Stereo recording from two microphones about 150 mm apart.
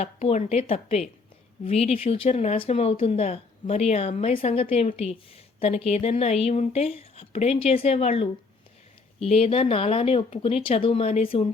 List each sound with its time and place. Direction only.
0.0 s speech: 45° left (ahead or behind)